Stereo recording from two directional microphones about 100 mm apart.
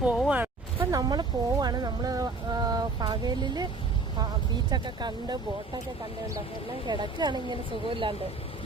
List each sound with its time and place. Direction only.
0.3 s a sound: 15° right (ahead or behind)
0.9 s speech: 40° right (ahead or behind)
4.7 s speech: 45° right (ahead or behind)
6.8 s speech: 45° right (ahead or behind)